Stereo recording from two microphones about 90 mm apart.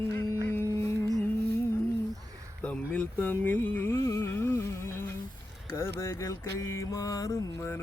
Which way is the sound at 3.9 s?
35° left (ahead or behind).